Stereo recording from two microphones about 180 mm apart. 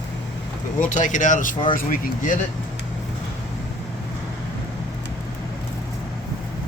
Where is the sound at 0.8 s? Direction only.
45° left (ahead or behind).